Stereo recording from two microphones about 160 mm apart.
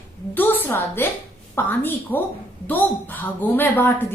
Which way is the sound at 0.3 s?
10° left (ahead or behind).